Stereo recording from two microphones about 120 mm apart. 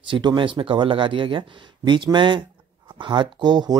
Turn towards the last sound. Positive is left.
turn(degrees=-35)  # may be behind; listen again after turning